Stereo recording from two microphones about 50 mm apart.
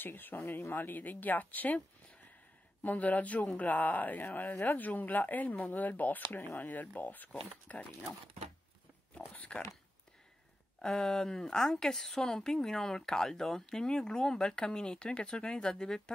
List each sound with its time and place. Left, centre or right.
0.0 s speech: left
2.8 s speech: left
9.3 s speech: left
10.8 s a woman's voice: centre